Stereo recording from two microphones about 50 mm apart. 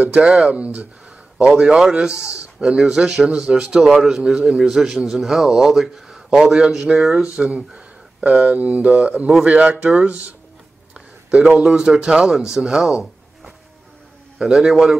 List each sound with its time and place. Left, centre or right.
0.0 s speech: right
1.5 s a man's voice: centre
7.3 s speech: right
8.5 s speech: right
11.2 s a man's voice: centre
13.0 s a sound: centre
14.4 s a man's voice: centre